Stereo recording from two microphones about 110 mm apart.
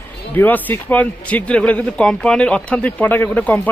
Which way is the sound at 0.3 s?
20° left (ahead or behind).